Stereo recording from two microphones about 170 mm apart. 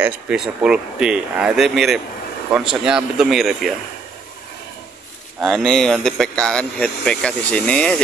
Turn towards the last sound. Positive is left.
turn(degrees=5)  # may be behind; listen again after turning